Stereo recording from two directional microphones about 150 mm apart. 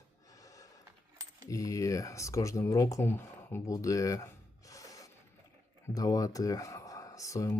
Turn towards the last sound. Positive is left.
turn(degrees=20)  # may be behind; listen again after turning